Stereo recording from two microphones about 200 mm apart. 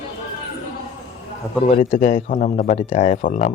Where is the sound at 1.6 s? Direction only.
45° left (ahead or behind).